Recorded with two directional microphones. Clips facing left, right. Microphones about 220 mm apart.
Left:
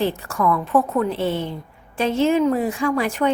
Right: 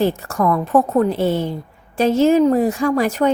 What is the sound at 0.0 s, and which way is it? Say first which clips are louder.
A woman's voice: right 3 dB; 45° right (ahead or behind).